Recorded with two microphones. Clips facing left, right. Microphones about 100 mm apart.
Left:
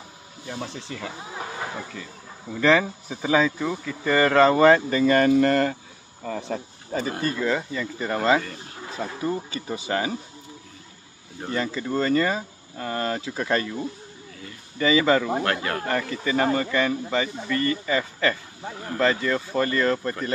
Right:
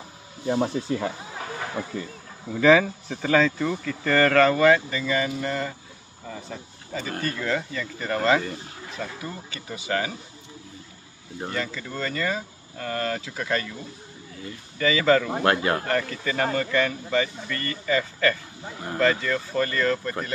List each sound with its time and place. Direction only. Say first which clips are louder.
0.7 s speech: right 8 dB; 50° right (ahead or behind)
2.5 s speech: right 2 dB; 5° right (ahead or behind)
2.8 s speech: right 1 dB; 10° left (ahead or behind); by 6.6 s 65° left (ahead or behind)
7.1 s speech: left 1 dB; 25° left (ahead or behind)
7.3 s speech: left 2 dB; 10° left (ahead or behind)
8.9 s speech: left 7 dB; 30° left (ahead or behind)
11.5 s speech: left 7 dB; 30° left (ahead or behind)
14.8 s speech: left 1 dB; 20° left (ahead or behind)
15.4 s speech: right 4 dB; 30° right (ahead or behind)
16.1 s speech: left 3 dB; 20° left (ahead or behind)